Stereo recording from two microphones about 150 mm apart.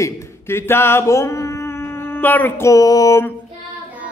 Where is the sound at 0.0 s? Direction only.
15° left (ahead or behind).